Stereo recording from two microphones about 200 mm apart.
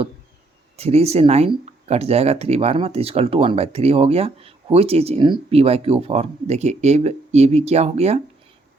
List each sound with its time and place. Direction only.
0.8 s speech: 30° right (ahead or behind)